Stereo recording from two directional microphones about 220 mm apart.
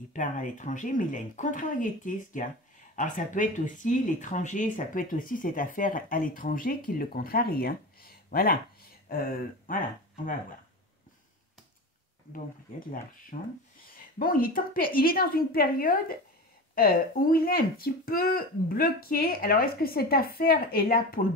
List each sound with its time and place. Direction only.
0.1 s speech: 35° left (ahead or behind)
13.3 s a woman's voice: 35° left (ahead or behind)